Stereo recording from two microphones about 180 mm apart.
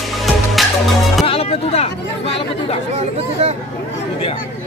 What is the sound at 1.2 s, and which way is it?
Chatter, 30° left (ahead or behind).